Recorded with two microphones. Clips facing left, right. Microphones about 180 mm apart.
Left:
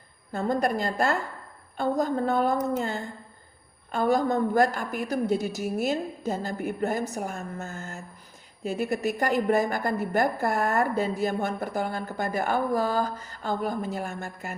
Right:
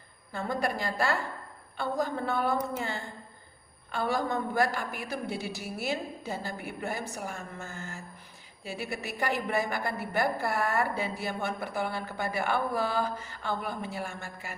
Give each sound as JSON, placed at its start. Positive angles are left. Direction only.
{"t": 0.3, "sound": "a woman's voice", "side_deg": 45}